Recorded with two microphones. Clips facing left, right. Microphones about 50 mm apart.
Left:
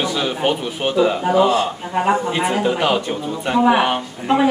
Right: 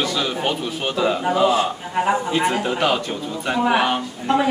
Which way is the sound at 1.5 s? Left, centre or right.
Centre.